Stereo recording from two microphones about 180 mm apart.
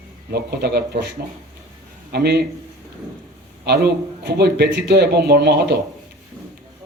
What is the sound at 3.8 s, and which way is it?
Speech, 65° right (ahead or behind).